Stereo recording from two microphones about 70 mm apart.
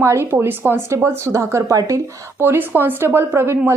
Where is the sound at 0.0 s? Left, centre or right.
Right.